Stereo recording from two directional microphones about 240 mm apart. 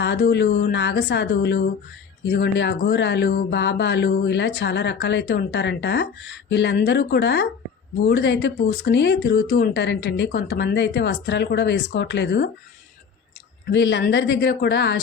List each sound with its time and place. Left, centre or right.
0.0 s speech: left
13.7 s speech: left